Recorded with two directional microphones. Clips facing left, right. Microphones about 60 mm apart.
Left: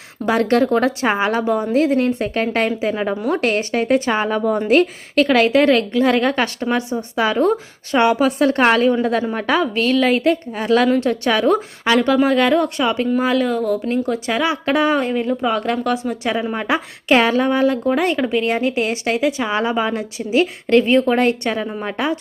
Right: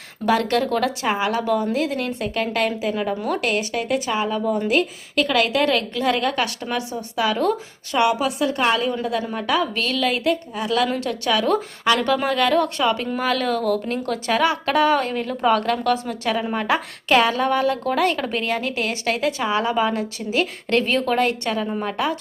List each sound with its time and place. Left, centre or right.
0.3 s a woman's voice: left
9.3 s a woman's voice: left
10.8 s a woman's voice: left